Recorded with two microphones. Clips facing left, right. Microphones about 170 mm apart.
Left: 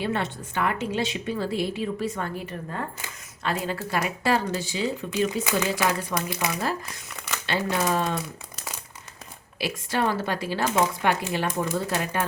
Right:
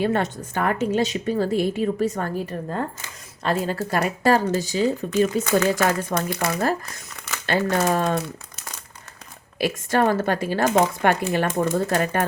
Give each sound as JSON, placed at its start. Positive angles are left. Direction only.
{"t": 0.0, "sound": "a woman's voice", "side_deg": -45}
{"t": 9.6, "sound": "a woman's voice", "side_deg": -50}